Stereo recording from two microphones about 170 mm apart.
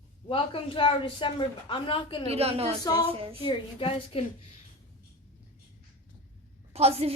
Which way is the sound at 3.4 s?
30° left (ahead or behind).